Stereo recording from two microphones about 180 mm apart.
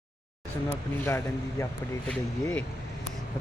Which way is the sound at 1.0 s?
15° left (ahead or behind).